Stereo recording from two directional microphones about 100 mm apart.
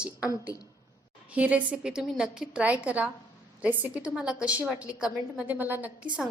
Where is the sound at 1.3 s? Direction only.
15° right (ahead or behind).